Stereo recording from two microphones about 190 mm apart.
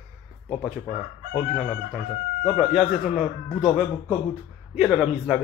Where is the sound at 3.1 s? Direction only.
Centre (ahead or behind).